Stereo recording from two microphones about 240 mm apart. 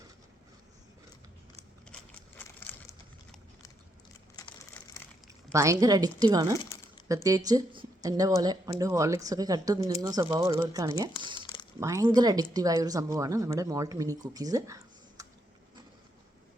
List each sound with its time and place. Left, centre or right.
4.4 s crumpling: centre
5.5 s speech: centre
11.1 s speech: left
11.8 s speech: centre